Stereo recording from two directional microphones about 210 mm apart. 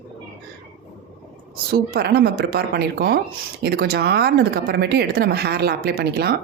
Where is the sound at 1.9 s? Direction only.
50° right (ahead or behind).